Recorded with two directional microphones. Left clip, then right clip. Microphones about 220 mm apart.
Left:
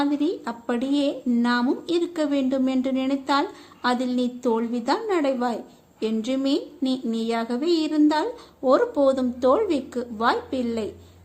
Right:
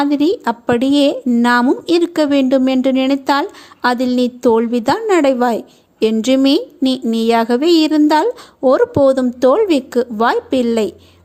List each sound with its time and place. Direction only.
0.0 s speech: 40° right (ahead or behind)